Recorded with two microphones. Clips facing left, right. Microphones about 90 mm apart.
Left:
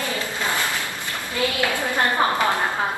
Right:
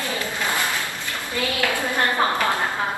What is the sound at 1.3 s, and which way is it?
A woman's voice, 20° left (ahead or behind).